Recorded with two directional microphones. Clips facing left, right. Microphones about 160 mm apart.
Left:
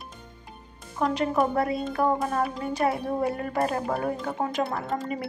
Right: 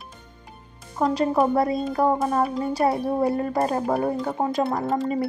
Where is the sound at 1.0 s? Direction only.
35° right (ahead or behind).